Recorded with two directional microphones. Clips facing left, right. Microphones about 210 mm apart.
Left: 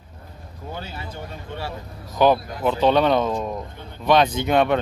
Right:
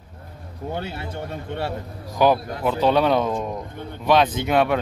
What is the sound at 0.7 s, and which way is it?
Speech, 65° right (ahead or behind).